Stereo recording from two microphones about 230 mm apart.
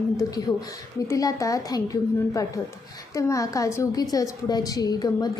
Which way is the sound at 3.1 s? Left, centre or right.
Centre.